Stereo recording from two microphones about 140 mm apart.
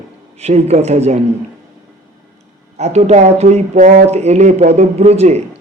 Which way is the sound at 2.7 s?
50° right (ahead or behind).